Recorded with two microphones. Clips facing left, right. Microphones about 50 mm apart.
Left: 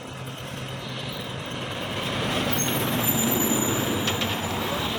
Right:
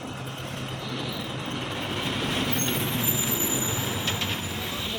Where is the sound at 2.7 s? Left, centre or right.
Left.